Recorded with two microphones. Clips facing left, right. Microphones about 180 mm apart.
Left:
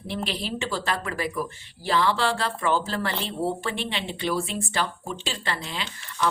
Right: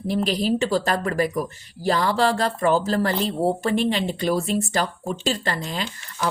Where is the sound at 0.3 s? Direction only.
40° right (ahead or behind).